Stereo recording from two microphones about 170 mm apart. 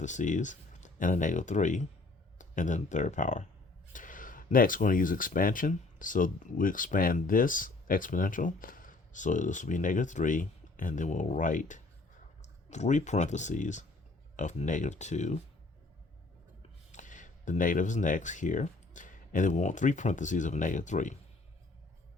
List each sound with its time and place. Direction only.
0.0 s speech: 45° left (ahead or behind)
16.9 s speech: 50° left (ahead or behind)